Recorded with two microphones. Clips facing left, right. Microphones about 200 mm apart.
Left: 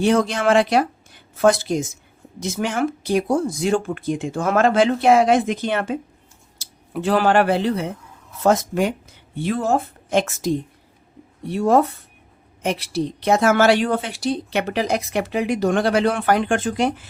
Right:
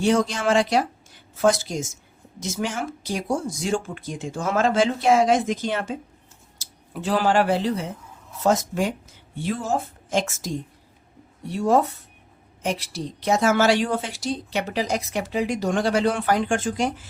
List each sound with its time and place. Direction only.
0.0 s a woman's voice: 60° left (ahead or behind)